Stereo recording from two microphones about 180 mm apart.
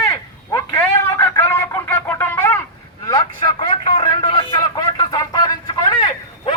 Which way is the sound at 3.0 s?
20° left (ahead or behind).